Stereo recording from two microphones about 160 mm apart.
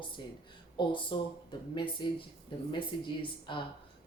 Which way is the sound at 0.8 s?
30° left (ahead or behind).